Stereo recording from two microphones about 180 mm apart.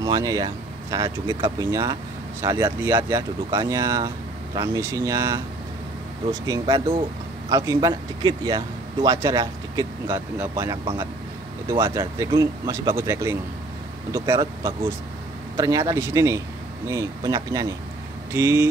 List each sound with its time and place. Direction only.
0.0 s speech: 20° right (ahead or behind)
6.4 s speech: 20° right (ahead or behind)
10.3 s speech: 10° right (ahead or behind)